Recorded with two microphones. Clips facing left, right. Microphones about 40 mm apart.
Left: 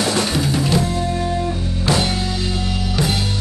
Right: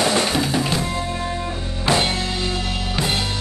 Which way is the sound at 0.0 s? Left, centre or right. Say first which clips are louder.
Even; right.